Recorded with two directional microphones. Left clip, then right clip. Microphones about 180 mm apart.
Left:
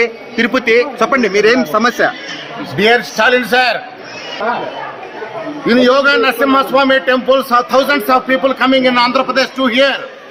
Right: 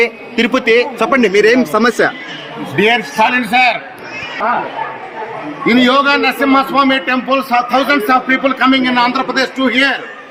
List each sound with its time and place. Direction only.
0.0 s a man's voice: 15° right (ahead or behind)
2.7 s a man's voice: 30° left (ahead or behind)
5.6 s a man's voice: 15° left (ahead or behind)